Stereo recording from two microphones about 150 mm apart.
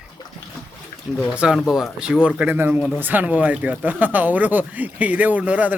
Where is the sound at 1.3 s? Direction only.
5° right (ahead or behind).